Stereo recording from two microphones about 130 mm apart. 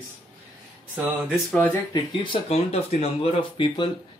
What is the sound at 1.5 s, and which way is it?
Speech, 5° left (ahead or behind).